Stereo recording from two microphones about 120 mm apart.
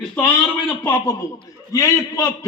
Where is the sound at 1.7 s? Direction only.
25° left (ahead or behind).